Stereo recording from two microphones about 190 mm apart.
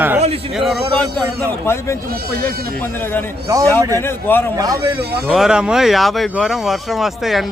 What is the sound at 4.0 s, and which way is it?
Speech, 10° left (ahead or behind).